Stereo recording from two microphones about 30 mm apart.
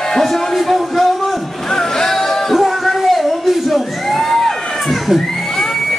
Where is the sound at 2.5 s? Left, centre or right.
Centre.